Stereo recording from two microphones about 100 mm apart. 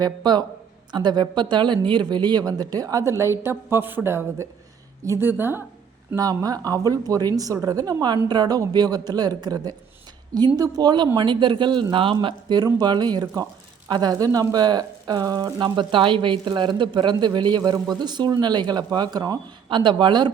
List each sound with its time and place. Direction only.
0.0 s a woman's voice: 45° right (ahead or behind); by 5.6 s 20° right (ahead or behind)
6.1 s speech: 35° right (ahead or behind)
19.6 s speech: 55° right (ahead or behind)